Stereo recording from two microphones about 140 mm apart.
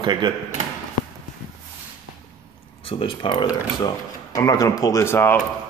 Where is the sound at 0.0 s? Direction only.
35° right (ahead or behind).